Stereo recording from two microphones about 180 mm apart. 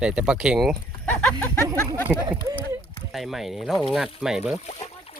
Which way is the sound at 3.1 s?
Centre (ahead or behind).